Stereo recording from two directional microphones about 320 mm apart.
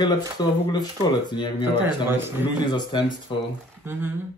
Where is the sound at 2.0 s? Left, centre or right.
Centre.